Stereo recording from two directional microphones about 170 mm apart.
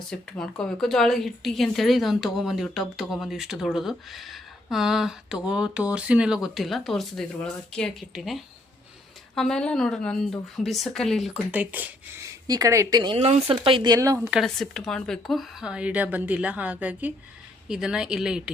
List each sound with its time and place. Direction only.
0.1 s a woman's voice: 5° left (ahead or behind)
11.5 s speech: 10° right (ahead or behind)
14.2 s a woman's voice: 5° right (ahead or behind)